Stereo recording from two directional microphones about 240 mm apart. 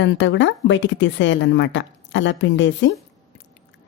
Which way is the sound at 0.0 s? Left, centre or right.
Left.